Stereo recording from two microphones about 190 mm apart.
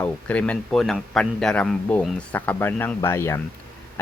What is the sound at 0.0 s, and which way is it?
A man's voice, 5° left (ahead or behind).